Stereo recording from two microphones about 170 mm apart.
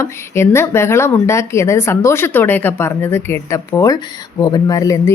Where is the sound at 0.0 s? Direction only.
15° left (ahead or behind).